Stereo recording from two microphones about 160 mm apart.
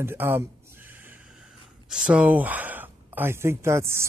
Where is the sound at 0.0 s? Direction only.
15° right (ahead or behind).